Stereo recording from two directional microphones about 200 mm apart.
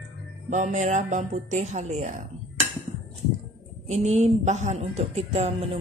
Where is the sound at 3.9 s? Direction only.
35° right (ahead or behind).